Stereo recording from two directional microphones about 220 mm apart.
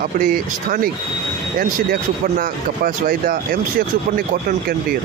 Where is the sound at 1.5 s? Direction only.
40° right (ahead or behind).